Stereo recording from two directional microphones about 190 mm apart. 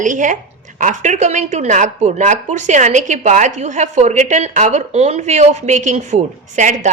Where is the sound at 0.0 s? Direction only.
40° right (ahead or behind).